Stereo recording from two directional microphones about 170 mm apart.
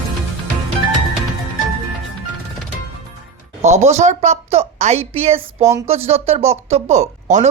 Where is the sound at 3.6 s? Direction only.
40° right (ahead or behind).